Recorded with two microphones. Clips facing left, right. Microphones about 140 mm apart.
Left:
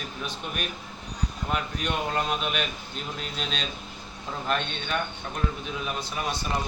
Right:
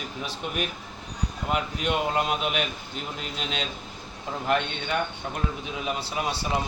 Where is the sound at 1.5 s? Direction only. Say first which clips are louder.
Right 3 dB; 20° right (ahead or behind).